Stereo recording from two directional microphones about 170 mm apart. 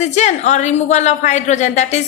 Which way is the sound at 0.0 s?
45° left (ahead or behind).